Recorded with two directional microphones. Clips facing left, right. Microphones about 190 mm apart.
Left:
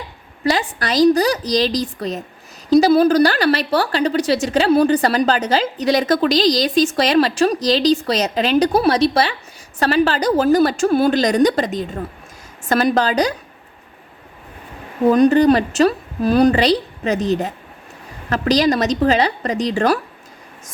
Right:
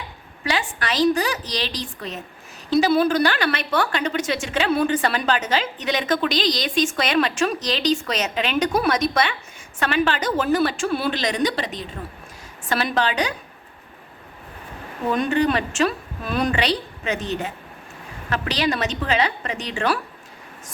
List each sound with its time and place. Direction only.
0.4 s a woman's voice: 35° left (ahead or behind)
15.1 s a woman's voice: 40° left (ahead or behind)